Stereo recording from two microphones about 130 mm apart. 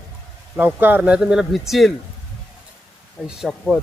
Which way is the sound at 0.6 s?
15° right (ahead or behind).